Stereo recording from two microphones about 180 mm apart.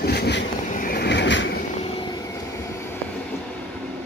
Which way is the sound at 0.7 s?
55° left (ahead or behind).